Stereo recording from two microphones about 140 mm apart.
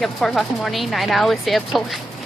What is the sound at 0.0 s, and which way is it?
A woman's voice, centre (ahead or behind).